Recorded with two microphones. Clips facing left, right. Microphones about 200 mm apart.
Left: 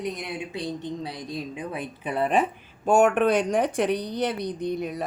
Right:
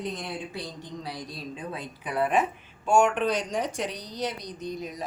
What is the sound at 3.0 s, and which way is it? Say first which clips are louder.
Speech: left 5 dB; 55° left (ahead or behind).